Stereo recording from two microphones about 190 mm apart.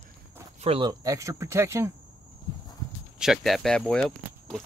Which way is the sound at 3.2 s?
Centre (ahead or behind).